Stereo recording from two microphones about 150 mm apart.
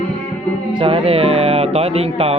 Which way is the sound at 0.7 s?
40° right (ahead or behind).